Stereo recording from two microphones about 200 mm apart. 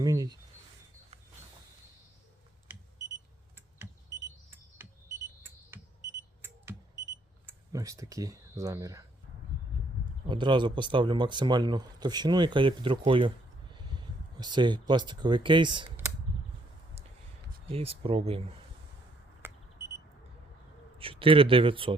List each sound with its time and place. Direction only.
0.0 s speech: 20° right (ahead or behind)
4.8 s a sound: 10° right (ahead or behind)
7.4 s speech: 15° right (ahead or behind)
10.2 s speech: 25° right (ahead or behind)
17.7 s speech: 30° right (ahead or behind)
19.4 s alarm: 10° right (ahead or behind)
21.0 s speech: 25° right (ahead or behind)